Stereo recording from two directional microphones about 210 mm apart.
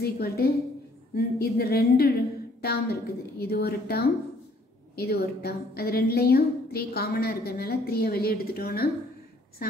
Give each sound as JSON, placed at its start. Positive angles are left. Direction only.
{"t": 0.0, "sound": "a woman's voice", "side_deg": 45}